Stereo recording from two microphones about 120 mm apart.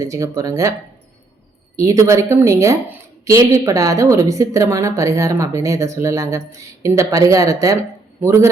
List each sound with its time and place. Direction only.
0.0 s a woman's voice: 25° right (ahead or behind)
1.7 s a woman's voice: 25° right (ahead or behind)